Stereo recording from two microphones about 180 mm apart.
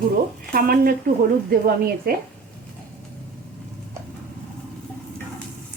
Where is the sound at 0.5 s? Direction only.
55° right (ahead or behind).